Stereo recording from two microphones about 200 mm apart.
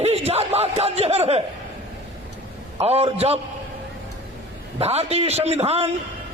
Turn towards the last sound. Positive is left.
turn(degrees=-30)  # may be behind; listen again after turning